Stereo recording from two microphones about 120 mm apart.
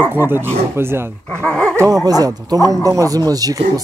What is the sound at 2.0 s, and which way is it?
A man's voice, 30° right (ahead or behind).